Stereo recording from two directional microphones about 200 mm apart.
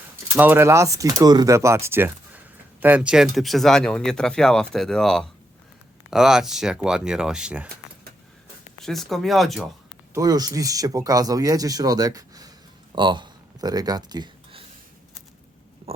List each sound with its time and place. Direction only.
0.3 s speech: 10° right (ahead or behind)
8.8 s speech: centre (ahead or behind)
10.2 s speech: 20° right (ahead or behind)
12.9 s a sound: 25° right (ahead or behind)